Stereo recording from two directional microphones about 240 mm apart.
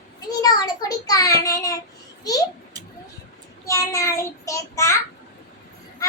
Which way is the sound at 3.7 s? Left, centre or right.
Centre.